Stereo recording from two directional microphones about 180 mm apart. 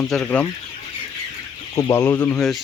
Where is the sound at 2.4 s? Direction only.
Centre (ahead or behind).